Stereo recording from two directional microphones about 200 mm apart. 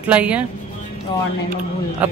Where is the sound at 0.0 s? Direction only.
5° right (ahead or behind).